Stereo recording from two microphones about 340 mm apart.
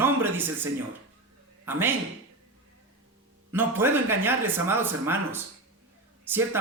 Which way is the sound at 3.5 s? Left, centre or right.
Centre.